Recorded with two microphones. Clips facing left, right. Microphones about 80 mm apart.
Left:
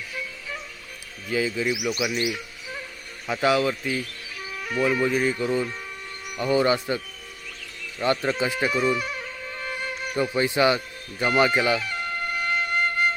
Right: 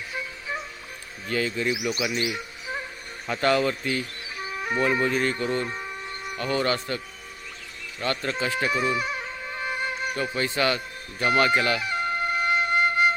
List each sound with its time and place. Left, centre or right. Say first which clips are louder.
0.1 s music: right 4 dB; right
1.3 s speech: left 1 dB; centre
4.4 s music: right 3 dB; right
4.8 s speech: left 2 dB; centre
5.6 s music: right 2 dB; right
6.4 s speech: left 4 dB; centre
8.0 s speech: left 4 dB; centre
8.7 s music: left 1 dB; centre
10.3 s speech: left 5 dB; centre
11.8 s music: right 3 dB; centre